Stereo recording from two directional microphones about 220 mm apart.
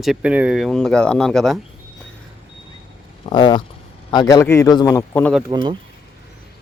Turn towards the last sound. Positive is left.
turn(degrees=-20)  # may be behind; listen again after turning